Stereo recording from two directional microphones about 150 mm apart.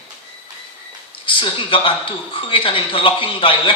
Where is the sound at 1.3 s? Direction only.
35° left (ahead or behind).